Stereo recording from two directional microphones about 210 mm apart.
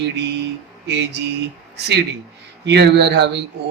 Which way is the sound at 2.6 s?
55° right (ahead or behind).